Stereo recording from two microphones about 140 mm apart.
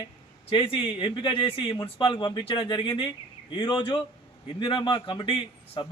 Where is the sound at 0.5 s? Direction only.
40° left (ahead or behind).